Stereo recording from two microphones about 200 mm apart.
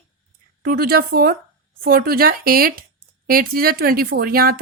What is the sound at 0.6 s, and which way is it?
Speech, 50° right (ahead or behind).